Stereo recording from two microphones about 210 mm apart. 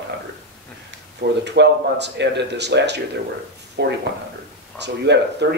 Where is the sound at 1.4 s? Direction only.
55° right (ahead or behind).